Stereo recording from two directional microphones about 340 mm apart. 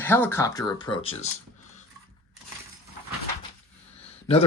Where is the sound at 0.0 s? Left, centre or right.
Centre.